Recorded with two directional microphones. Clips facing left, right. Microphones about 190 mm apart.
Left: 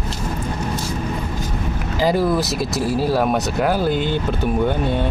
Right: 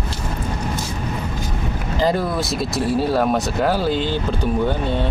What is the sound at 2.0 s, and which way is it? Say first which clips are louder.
Speech: left 2 dB; 5° left (ahead or behind).